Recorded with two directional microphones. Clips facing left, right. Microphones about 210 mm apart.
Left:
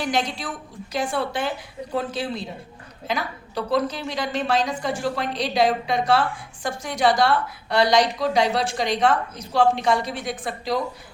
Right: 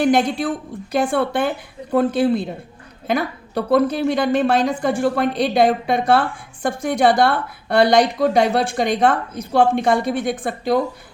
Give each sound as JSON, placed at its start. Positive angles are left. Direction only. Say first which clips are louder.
{"t": 0.0, "sound": "a woman's voice", "louder": "right 9 dB", "side_deg": -55}